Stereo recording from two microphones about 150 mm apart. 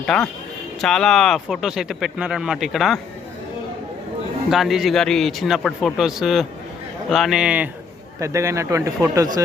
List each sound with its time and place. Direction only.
0.0 s speech: 5° left (ahead or behind)
4.5 s speech: centre (ahead or behind)
8.2 s speech: 20° right (ahead or behind)